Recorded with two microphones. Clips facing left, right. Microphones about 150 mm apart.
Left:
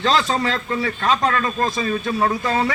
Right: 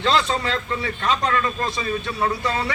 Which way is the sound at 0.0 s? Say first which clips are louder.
Left 2 dB; 40° left (ahead or behind).